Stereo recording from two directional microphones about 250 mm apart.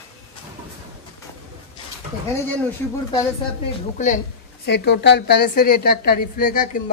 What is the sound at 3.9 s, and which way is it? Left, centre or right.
A woman's voice, left.